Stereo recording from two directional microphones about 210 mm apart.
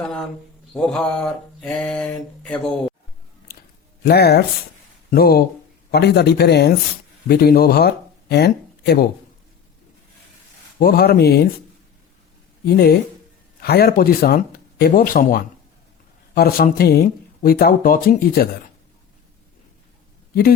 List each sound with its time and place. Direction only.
0.0 s a sound: 5° left (ahead or behind)
0.7 s mantra: 5° left (ahead or behind)
4.0 s speech: 50° left (ahead or behind)
10.8 s speech: 45° left (ahead or behind)
12.6 s speech: 50° left (ahead or behind)